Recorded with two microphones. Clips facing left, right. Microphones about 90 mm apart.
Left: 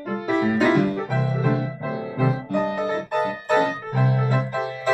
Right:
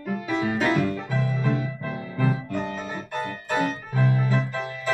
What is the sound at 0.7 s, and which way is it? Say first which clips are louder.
Music: left 4 dB; 55° left (ahead or behind).